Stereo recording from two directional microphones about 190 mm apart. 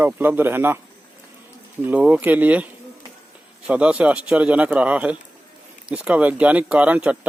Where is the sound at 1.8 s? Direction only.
10° right (ahead or behind).